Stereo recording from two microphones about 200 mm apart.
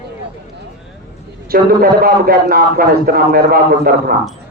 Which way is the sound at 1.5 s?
50° right (ahead or behind).